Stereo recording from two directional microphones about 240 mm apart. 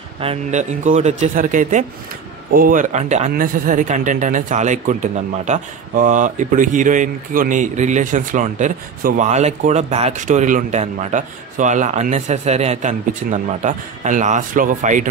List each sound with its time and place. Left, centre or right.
0.2 s speech: right